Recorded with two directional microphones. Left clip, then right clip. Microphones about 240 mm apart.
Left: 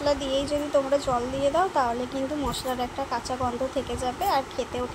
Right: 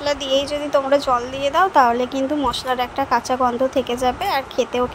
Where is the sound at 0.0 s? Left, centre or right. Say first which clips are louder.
Right 6 dB; right.